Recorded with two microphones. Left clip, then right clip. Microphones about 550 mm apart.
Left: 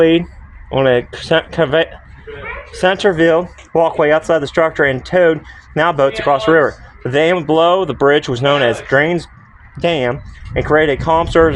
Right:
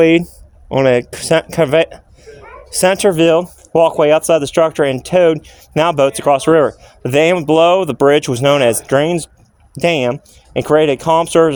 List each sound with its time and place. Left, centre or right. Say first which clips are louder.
0.0 s speech: right 1 dB; right